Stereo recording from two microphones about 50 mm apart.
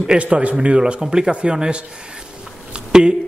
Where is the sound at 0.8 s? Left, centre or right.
Centre.